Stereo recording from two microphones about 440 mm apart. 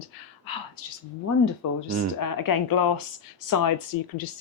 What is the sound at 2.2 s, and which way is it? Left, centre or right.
Speech, left.